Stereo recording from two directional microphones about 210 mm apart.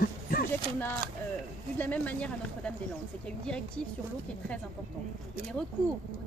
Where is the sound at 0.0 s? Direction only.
45° left (ahead or behind).